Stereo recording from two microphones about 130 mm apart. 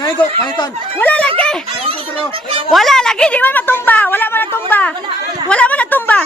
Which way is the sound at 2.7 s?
Centre (ahead or behind).